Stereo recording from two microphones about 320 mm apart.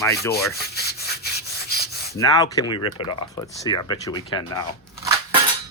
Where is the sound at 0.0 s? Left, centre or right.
Centre.